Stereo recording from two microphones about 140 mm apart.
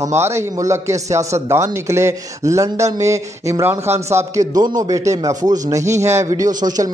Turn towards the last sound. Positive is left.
turn(degrees=-30)  # may be behind; listen again after turning